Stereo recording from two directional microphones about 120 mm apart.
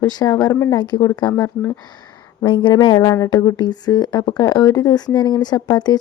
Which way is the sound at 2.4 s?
40° left (ahead or behind).